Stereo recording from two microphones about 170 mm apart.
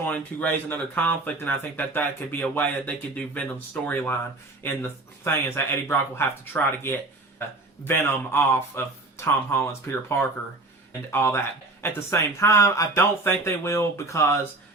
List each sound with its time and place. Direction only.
0.1 s speech: 10° left (ahead or behind)